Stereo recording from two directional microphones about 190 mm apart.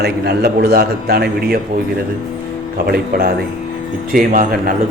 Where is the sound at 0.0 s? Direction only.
55° right (ahead or behind).